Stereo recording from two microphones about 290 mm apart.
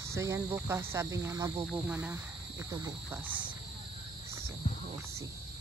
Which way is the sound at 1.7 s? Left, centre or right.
Centre.